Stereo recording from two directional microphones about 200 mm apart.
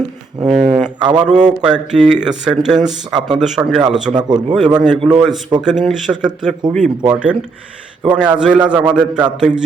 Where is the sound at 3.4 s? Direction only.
Centre (ahead or behind).